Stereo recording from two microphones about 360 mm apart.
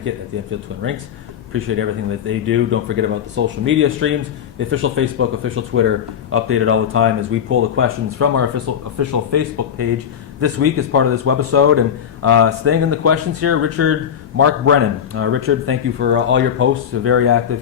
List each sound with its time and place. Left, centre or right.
1.5 s speech: right